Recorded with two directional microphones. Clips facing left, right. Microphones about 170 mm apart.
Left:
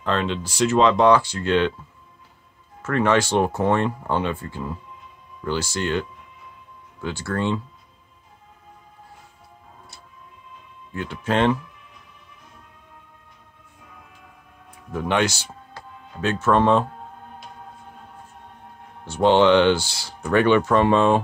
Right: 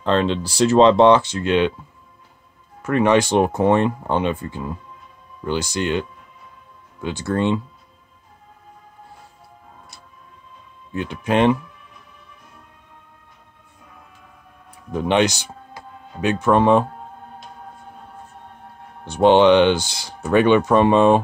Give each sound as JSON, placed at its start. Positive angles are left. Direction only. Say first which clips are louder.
{"t": 0.0, "sound": "speech", "louder": "right 5 dB", "side_deg": -30}
{"t": 2.8, "sound": "speech", "louder": "right 3 dB", "side_deg": -15}
{"t": 10.9, "sound": "speech", "louder": "right 3 dB", "side_deg": -20}
{"t": 14.9, "sound": "a man's voice", "louder": "right 4 dB", "side_deg": -20}
{"t": 19.0, "sound": "speech", "louder": "right 3 dB", "side_deg": -20}